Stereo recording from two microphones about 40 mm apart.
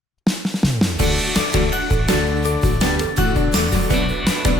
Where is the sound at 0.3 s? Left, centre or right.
Centre.